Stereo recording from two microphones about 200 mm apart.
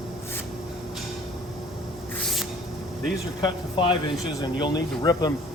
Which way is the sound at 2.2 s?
Centre (ahead or behind).